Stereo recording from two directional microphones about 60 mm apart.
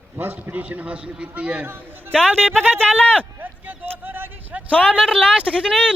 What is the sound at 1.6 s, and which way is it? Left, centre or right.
Speech, right.